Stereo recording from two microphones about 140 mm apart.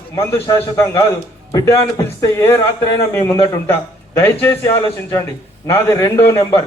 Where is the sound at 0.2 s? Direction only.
20° left (ahead or behind).